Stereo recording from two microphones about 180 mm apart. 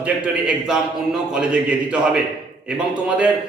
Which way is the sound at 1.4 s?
5° right (ahead or behind).